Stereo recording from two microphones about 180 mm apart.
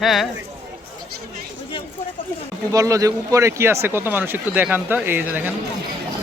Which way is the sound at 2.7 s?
20° right (ahead or behind).